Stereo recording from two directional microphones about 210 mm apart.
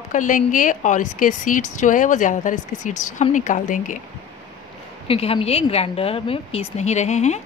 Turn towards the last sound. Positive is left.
turn(degrees=35)  # may be behind; listen again after turning